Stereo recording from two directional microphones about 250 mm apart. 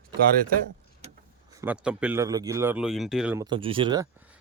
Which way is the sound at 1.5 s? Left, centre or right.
Centre.